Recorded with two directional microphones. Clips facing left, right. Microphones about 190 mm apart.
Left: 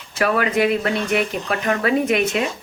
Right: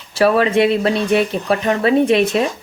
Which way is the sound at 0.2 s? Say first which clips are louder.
Right 5 dB; 30° right (ahead or behind).